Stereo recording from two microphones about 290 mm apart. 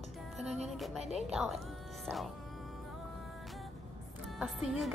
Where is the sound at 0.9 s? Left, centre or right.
Right.